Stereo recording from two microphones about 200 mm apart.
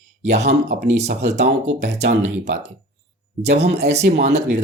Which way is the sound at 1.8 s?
60° right (ahead or behind).